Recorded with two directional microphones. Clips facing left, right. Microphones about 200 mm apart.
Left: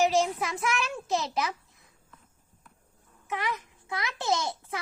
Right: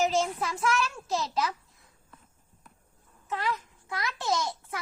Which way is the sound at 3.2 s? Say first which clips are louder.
Right 1 dB; 20° left (ahead or behind).